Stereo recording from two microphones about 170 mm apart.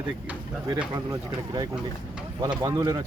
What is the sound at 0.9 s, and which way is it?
Speech, 25° right (ahead or behind).